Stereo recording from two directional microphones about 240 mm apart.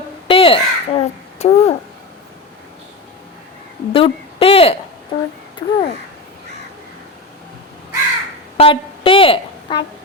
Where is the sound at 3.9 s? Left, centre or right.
Left.